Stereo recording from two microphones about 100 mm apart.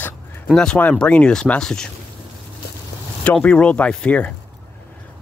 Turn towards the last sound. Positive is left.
turn(degrees=15)  # may be behind; listen again after turning